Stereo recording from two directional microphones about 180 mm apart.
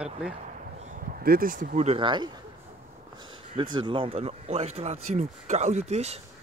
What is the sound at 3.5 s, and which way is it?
Speech, 25° right (ahead or behind).